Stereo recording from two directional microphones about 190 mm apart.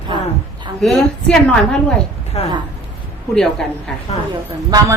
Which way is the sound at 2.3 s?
35° left (ahead or behind).